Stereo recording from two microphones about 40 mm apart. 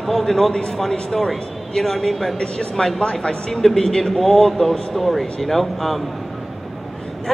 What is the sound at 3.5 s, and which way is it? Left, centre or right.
A man's voice, centre.